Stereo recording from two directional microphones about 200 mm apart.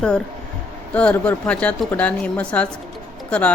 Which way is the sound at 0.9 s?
5° left (ahead or behind).